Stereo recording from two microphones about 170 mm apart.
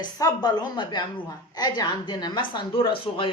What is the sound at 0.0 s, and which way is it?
A woman's voice, 25° left (ahead or behind).